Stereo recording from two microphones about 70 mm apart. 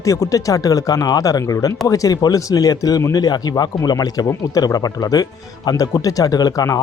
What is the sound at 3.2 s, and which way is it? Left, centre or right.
Speech, left.